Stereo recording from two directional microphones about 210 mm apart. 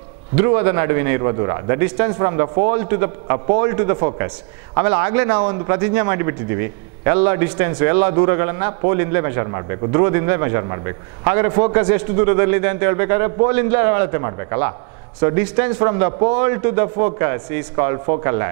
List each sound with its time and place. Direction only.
0.4 s speech: 10° right (ahead or behind)